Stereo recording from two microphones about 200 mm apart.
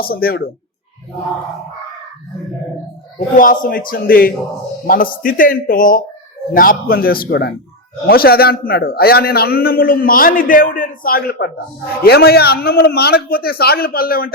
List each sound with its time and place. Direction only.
0.0 s a man's voice: 50° left (ahead or behind)
3.2 s a man's voice: 40° left (ahead or behind)